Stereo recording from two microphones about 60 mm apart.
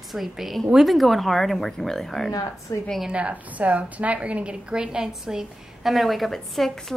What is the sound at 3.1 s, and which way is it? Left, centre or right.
A woman's voice, right.